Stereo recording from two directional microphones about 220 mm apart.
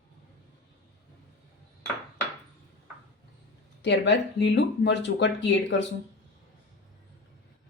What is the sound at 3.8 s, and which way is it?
Speech, 50° left (ahead or behind).